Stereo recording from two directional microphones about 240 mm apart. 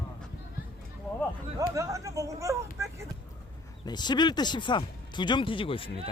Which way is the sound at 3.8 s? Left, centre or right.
Centre.